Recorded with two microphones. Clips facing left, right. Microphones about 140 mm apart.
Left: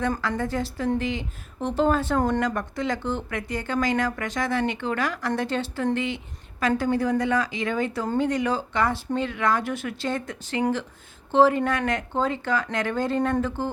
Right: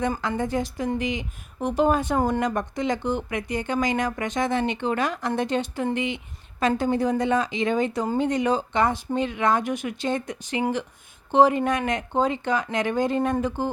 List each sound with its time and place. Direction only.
0.2 s speech: 20° right (ahead or behind)
2.4 s speech: 20° right (ahead or behind)